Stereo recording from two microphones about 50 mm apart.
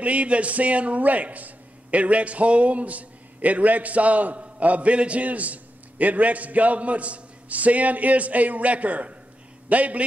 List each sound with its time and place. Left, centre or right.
0.0 s a man's voice: right